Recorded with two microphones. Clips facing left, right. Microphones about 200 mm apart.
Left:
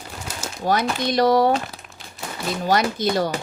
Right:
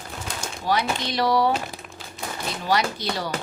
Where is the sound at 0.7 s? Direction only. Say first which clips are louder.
Left 3 dB; 45° left (ahead or behind).